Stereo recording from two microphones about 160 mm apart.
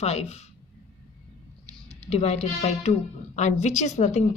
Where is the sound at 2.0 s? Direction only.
45° left (ahead or behind).